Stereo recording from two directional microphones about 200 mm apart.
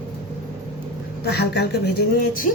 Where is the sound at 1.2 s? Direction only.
55° left (ahead or behind).